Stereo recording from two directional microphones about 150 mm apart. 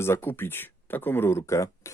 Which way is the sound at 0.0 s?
15° left (ahead or behind).